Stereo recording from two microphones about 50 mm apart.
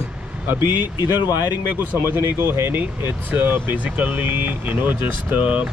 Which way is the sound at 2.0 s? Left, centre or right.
Right.